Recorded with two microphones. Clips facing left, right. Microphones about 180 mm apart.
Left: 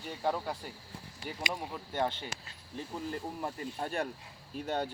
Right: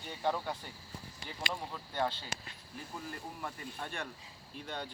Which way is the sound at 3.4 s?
35° left (ahead or behind).